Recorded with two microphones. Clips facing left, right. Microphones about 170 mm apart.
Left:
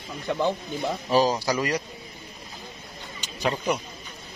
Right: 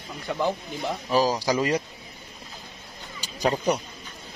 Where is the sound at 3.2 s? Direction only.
35° right (ahead or behind).